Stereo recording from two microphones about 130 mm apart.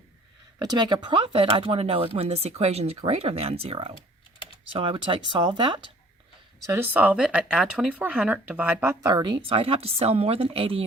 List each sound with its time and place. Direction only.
0.6 s speech: 30° right (ahead or behind)
6.7 s speech: 15° right (ahead or behind)
9.0 s speech: 35° right (ahead or behind)